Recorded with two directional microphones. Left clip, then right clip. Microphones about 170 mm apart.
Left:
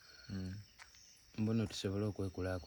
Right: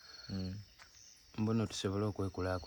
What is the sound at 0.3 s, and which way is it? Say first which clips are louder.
Speech: right 4 dB; 40° right (ahead or behind).